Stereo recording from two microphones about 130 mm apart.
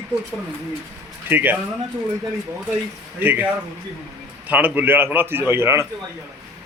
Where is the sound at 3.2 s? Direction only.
10° right (ahead or behind).